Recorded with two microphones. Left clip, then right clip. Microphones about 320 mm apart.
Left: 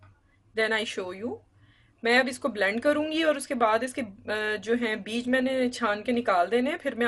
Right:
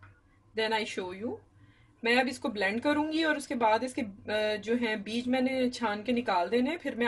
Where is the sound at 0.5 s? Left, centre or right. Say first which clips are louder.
Left 4 dB; left.